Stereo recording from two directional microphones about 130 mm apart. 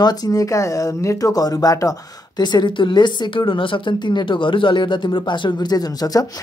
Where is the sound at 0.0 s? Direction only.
30° left (ahead or behind).